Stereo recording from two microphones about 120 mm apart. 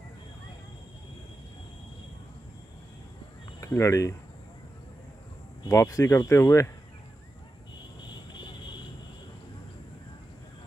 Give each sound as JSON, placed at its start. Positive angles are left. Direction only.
{"t": 3.6, "sound": "speech", "side_deg": 25}
{"t": 5.7, "sound": "speech", "side_deg": 25}